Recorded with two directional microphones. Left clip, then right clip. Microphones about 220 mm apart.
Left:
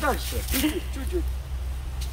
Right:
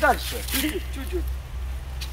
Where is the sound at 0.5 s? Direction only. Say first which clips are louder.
Left 1 dB; 15° left (ahead or behind).